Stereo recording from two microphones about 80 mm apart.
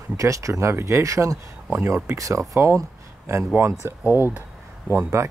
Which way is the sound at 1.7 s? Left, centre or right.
Right.